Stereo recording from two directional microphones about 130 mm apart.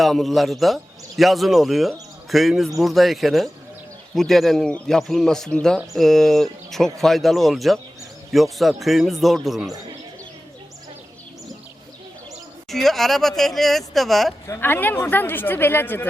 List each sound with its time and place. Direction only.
0.0 s a man's voice: centre (ahead or behind)
12.7 s a man's voice: centre (ahead or behind)
14.4 s speech: 20° left (ahead or behind)